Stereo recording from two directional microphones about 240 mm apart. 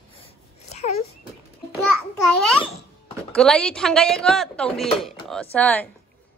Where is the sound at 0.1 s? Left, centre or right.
Left.